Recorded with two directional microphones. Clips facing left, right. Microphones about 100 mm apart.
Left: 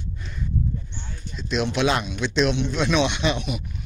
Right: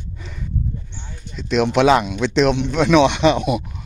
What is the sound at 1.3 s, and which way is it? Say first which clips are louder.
Speech: right 7 dB; 75° right (ahead or behind).